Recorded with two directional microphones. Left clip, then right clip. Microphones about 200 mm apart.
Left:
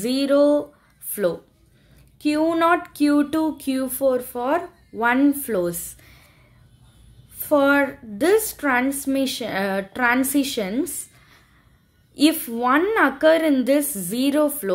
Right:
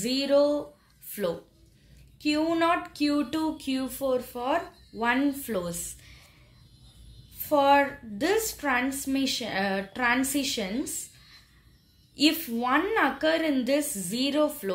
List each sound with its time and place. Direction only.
0.0 s a woman's voice: 55° left (ahead or behind)
7.3 s speech: 55° left (ahead or behind)